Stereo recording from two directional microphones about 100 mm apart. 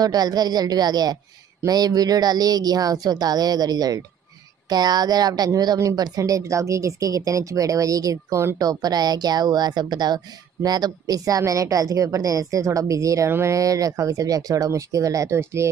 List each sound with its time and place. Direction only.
0.0 s speech: 40° right (ahead or behind)